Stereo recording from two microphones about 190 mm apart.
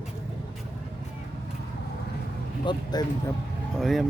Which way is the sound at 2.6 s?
20° left (ahead or behind).